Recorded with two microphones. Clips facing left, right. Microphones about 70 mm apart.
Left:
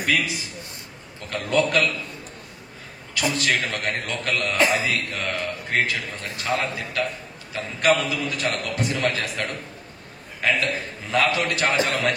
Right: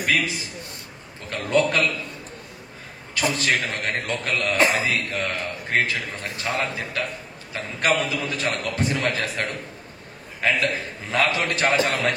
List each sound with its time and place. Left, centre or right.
0.0 s a sound: right
1.5 s a man's voice: right
3.2 s a man's voice: right
4.6 s speech: right
4.8 s a man's voice: right
11.1 s a man's voice: right